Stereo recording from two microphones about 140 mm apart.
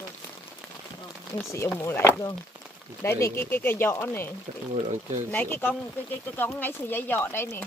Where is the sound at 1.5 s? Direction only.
20° left (ahead or behind).